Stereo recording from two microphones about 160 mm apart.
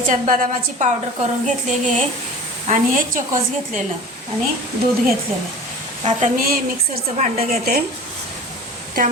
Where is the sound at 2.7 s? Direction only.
50° right (ahead or behind).